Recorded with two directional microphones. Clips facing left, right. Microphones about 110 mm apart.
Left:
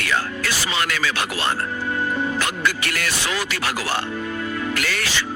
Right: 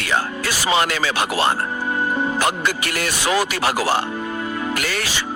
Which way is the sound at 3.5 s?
40° right (ahead or behind).